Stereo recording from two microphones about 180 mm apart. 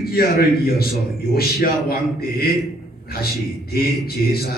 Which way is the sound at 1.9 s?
60° left (ahead or behind).